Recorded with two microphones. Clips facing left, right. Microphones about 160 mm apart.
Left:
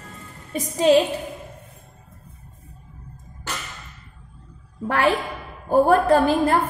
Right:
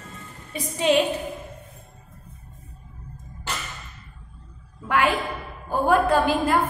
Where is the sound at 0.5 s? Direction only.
40° left (ahead or behind).